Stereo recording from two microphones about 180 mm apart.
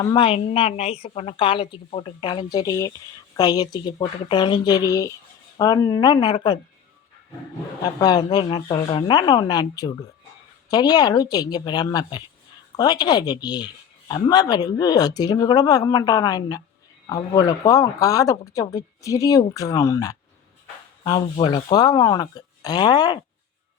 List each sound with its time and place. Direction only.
0.0 s a woman's voice: 25° left (ahead or behind)
7.9 s speech: 20° left (ahead or behind)